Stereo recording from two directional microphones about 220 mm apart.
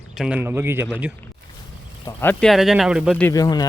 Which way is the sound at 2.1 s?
5° left (ahead or behind).